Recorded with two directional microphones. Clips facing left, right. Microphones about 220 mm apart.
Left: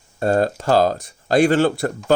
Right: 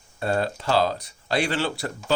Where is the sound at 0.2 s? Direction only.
45° left (ahead or behind).